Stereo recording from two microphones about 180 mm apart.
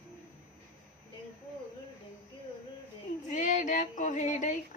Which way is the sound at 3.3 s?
45° left (ahead or behind).